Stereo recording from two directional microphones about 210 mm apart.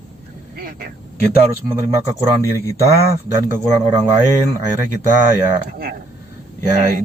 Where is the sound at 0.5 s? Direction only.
45° right (ahead or behind).